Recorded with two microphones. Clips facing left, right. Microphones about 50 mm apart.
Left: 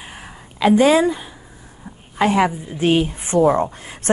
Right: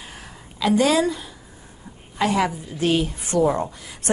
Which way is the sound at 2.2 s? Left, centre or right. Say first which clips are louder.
Left 4 dB; left.